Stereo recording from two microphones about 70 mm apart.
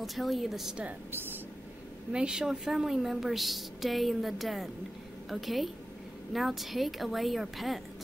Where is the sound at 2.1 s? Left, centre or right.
Centre.